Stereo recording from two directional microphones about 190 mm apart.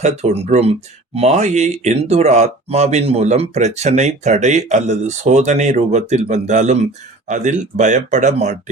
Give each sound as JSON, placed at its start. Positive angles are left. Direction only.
{"t": 0.0, "sound": "speech", "side_deg": -35}